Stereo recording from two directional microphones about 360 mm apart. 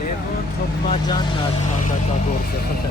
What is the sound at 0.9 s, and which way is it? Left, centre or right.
Speech, centre.